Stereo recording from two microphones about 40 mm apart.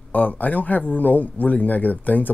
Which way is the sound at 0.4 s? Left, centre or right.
Left.